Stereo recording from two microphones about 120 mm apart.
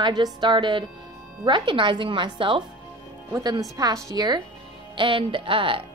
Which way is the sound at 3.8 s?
30° right (ahead or behind).